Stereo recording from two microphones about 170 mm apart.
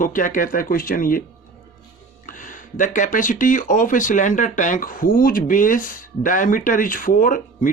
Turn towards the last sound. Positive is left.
turn(degrees=55)  # may be behind; listen again after turning